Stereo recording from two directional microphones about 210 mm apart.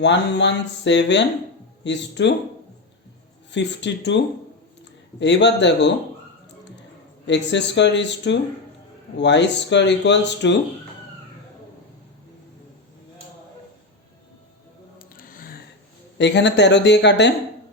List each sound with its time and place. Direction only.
0.0 s speech: 55° left (ahead or behind)
3.5 s speech: 55° left (ahead or behind)
5.2 s speech: 55° left (ahead or behind)
7.3 s speech: 55° left (ahead or behind)
14.9 s a sound: 40° left (ahead or behind)
16.1 s speech: 55° left (ahead or behind)